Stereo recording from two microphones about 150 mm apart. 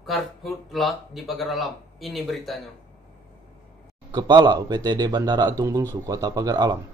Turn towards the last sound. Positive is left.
turn(degrees=-25)  # may be behind; listen again after turning